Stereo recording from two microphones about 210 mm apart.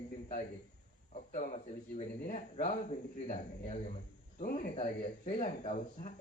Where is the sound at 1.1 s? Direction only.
35° left (ahead or behind).